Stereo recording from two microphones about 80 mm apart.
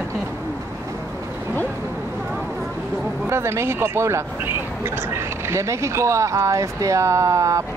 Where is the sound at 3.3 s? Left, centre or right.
Right.